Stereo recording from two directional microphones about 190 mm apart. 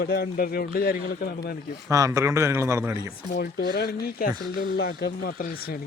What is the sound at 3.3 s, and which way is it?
Speech, 55° left (ahead or behind).